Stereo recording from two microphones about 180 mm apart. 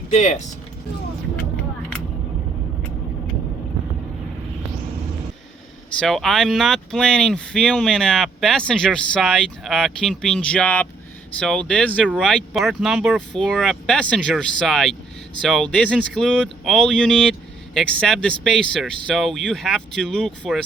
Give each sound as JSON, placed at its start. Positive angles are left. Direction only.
{"t": 0.1, "sound": "speech", "side_deg": 40}
{"t": 6.0, "sound": "speech", "side_deg": 0}